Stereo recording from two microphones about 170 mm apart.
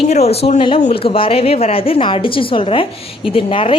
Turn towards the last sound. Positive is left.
turn(degrees=30)  # may be behind; listen again after turning